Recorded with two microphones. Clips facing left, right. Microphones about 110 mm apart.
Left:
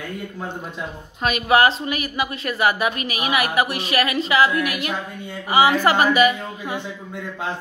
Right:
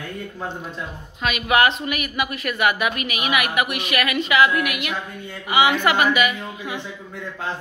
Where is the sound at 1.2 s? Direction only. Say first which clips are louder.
Left 2 dB; 35° left (ahead or behind).